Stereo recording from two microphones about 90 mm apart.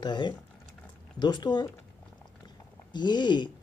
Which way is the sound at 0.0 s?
55° left (ahead or behind).